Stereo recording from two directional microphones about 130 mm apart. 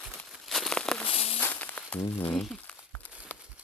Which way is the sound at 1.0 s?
50° left (ahead or behind).